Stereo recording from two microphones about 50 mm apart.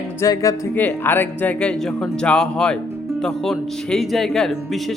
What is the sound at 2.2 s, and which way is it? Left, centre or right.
Speech, centre.